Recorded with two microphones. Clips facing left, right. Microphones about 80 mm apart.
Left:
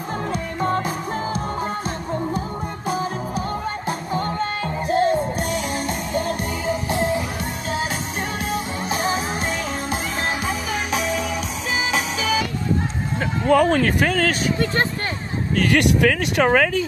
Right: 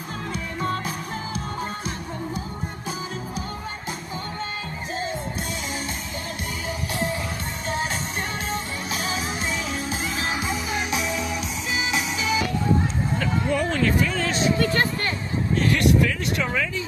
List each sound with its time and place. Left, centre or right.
0.6 s music: left
4.1 s music: left
6.7 s music: left
8.9 s music: left
13.5 s speech: left
15.5 s speech: left